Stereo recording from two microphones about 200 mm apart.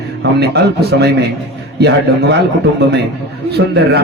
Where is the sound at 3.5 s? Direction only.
55° right (ahead or behind).